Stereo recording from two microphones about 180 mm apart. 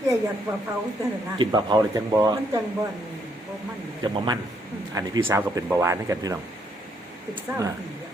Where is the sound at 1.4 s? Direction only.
20° right (ahead or behind).